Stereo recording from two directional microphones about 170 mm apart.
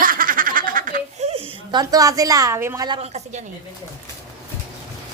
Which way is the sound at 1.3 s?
30° right (ahead or behind).